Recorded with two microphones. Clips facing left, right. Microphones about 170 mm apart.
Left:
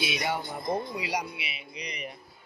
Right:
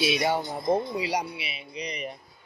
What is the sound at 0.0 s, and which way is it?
Speech, 30° right (ahead or behind).